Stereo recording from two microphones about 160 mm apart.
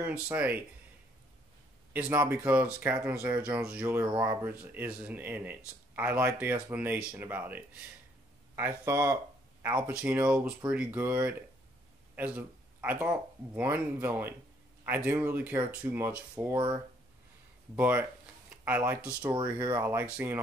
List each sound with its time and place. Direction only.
0.0 s speech: 10° right (ahead or behind)
2.0 s speech: 10° right (ahead or behind)
16.5 s speech: 30° right (ahead or behind)
17.7 s speech: 10° right (ahead or behind)